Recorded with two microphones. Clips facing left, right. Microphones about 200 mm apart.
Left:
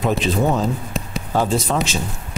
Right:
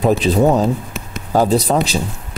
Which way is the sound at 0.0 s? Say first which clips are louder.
Right 5 dB; 35° right (ahead or behind).